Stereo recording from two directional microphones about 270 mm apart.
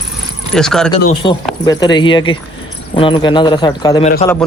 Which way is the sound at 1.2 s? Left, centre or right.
Centre.